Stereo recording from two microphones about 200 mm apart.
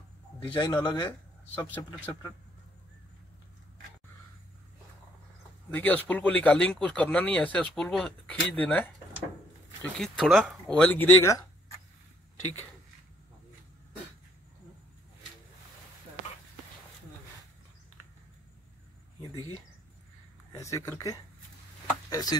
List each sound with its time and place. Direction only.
0.4 s speech: 20° left (ahead or behind)
1.5 s speech: 10° left (ahead or behind)
5.7 s speech: 10° left (ahead or behind)
9.9 s speech: centre (ahead or behind)
20.5 s speech: 15° left (ahead or behind)